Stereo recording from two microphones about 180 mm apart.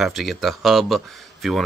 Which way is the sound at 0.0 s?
Centre (ahead or behind).